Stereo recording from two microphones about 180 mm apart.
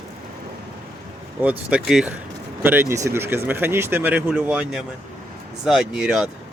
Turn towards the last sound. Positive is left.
turn(degrees=-5)  # may be behind; listen again after turning